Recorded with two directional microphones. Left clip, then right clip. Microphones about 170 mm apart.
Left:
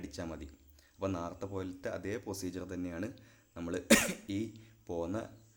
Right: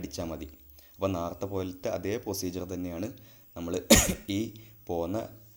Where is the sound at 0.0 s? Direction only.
10° right (ahead or behind).